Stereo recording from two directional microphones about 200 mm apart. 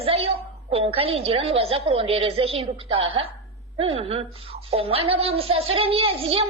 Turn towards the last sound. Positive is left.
turn(degrees=-30)  # may be behind; listen again after turning